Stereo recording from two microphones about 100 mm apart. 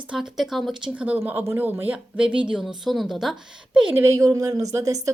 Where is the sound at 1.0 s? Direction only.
15° right (ahead or behind).